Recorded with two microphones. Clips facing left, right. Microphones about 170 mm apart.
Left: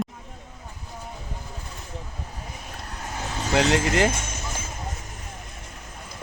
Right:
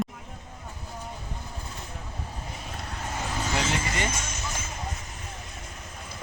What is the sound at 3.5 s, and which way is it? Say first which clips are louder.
Speech: left 10 dB; 90° left.